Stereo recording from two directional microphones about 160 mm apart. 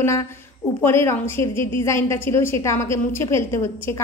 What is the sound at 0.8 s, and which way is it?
A woman's voice, 15° left (ahead or behind).